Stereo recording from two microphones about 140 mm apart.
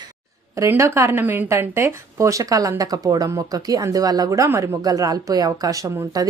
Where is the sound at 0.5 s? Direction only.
20° right (ahead or behind).